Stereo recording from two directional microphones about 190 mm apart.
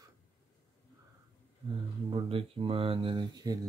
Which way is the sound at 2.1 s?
25° right (ahead or behind).